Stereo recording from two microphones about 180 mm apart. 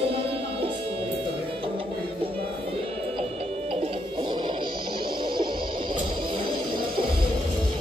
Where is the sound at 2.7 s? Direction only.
35° right (ahead or behind).